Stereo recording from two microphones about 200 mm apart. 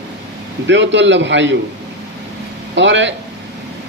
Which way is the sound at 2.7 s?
65° right (ahead or behind).